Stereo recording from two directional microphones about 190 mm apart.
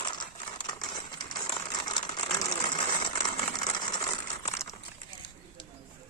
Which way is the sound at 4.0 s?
15° left (ahead or behind).